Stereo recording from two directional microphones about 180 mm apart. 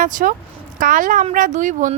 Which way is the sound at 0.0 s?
45° right (ahead or behind).